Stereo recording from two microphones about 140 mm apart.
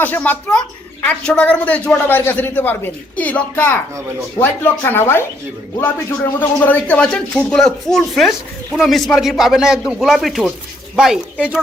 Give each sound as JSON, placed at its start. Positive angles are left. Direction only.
{"t": 0.0, "sound": "a man's voice", "side_deg": 10}